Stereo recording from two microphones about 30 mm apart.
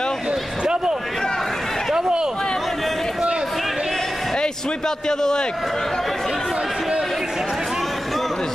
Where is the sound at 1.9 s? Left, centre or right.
Right.